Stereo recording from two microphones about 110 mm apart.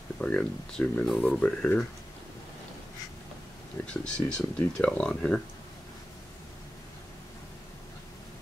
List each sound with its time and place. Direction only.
0.2 s speech: 10° left (ahead or behind)
1.0 s speech: centre (ahead or behind)
3.8 s speech: 10° left (ahead or behind)